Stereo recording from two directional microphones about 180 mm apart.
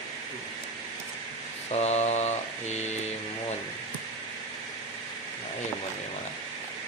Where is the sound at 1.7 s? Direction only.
35° left (ahead or behind).